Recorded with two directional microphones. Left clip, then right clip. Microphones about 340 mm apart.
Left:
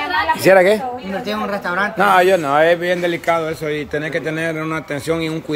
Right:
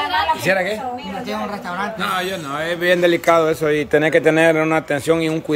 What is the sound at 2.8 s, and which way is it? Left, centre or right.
A man's voice, centre.